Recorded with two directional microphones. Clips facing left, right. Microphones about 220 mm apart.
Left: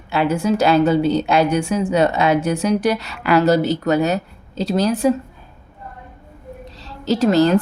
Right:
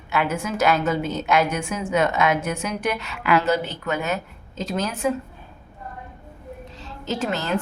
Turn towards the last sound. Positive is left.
turn(degrees=40)  # may be behind; listen again after turning